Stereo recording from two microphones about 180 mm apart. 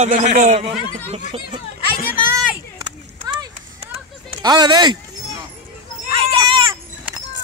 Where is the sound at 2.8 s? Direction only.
20° right (ahead or behind).